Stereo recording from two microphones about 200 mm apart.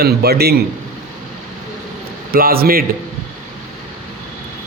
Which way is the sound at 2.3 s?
50° right (ahead or behind).